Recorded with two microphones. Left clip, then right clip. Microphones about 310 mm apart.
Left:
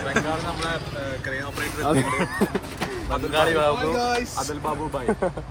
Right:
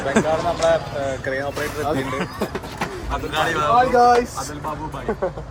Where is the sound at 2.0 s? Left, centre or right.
Centre.